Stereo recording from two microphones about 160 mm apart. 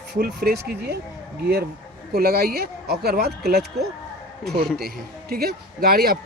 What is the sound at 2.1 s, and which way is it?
A man's voice, 75° right (ahead or behind).